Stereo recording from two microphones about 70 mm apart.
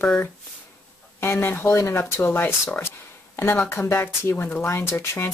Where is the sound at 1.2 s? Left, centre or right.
Left.